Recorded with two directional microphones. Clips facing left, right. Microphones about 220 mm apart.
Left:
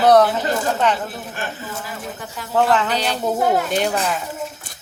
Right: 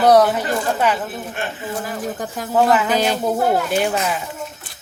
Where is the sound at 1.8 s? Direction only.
45° right (ahead or behind).